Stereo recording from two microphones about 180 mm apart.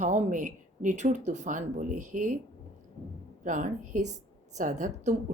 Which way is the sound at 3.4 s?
45° right (ahead or behind).